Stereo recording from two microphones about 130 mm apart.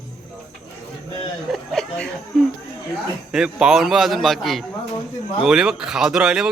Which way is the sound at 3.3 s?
5° right (ahead or behind).